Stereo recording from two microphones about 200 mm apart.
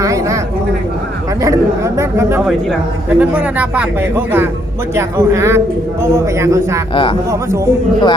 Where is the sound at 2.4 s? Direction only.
Centre (ahead or behind).